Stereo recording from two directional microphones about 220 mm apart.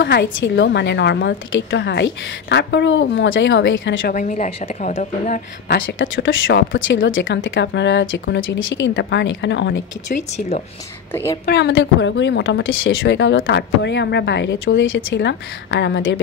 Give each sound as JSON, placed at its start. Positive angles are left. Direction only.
{"t": 0.0, "sound": "speech", "side_deg": 50}
{"t": 4.1, "sound": "a woman's voice", "side_deg": 35}
{"t": 5.7, "sound": "speech", "side_deg": 60}
{"t": 11.4, "sound": "speech", "side_deg": 50}